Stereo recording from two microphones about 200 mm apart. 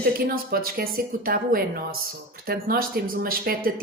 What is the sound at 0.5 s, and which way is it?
Speech, 45° right (ahead or behind).